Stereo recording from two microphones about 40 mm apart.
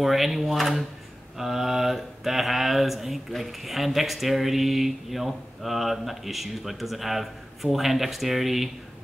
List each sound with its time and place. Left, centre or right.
0.0 s speech: centre